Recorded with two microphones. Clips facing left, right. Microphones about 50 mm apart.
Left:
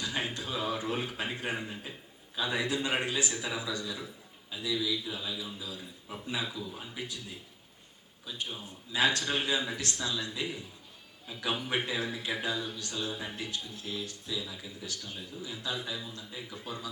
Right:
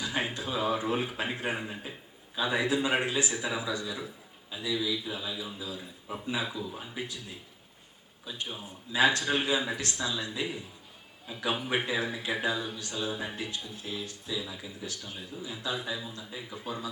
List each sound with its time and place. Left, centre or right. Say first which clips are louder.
0.0 s a man's voice: right 2 dB; centre